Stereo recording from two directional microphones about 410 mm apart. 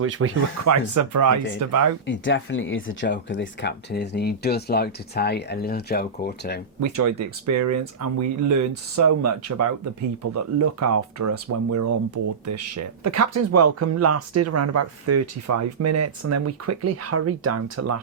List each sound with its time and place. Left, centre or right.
0.0 s speech: right
2.0 s speech: left
6.7 s speech: right